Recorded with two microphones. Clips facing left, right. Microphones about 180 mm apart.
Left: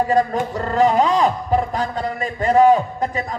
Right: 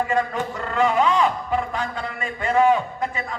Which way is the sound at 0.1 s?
40° left (ahead or behind).